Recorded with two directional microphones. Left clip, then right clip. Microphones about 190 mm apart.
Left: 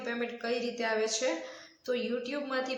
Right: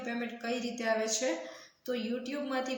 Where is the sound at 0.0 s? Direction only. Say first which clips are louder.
Left 3 dB; 15° left (ahead or behind).